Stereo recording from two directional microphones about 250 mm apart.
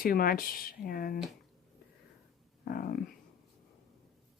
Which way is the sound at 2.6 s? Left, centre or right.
Left.